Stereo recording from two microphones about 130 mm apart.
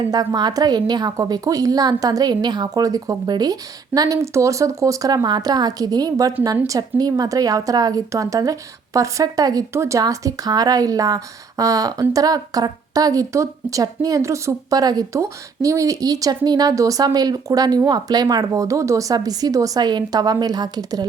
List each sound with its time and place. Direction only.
0.1 s a woman's voice: 30° right (ahead or behind)